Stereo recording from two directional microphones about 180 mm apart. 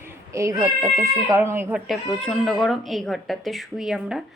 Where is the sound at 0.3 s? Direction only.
15° right (ahead or behind).